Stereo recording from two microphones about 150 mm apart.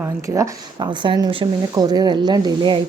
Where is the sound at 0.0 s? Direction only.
20° right (ahead or behind).